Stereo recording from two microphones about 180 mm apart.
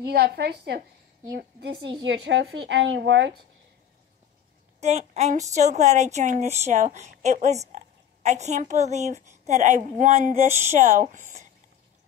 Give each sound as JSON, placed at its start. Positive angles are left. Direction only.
{"t": 0.0, "sound": "a woman's voice", "side_deg": -65}
{"t": 2.0, "sound": "a woman's voice", "side_deg": -75}
{"t": 4.7, "sound": "a woman's voice", "side_deg": -35}